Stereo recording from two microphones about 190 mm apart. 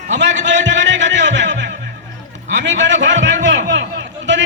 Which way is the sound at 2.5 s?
70° right (ahead or behind).